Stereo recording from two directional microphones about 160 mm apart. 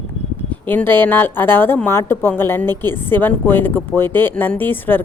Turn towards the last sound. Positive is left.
turn(degrees=10)  # may be behind; listen again after turning